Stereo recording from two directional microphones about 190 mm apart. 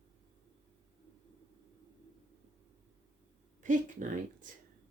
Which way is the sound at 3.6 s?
45° right (ahead or behind).